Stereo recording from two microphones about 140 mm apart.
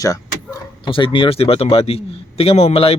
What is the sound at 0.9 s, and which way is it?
Speech, 40° left (ahead or behind).